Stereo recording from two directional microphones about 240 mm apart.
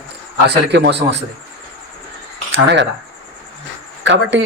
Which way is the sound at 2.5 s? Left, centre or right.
Right.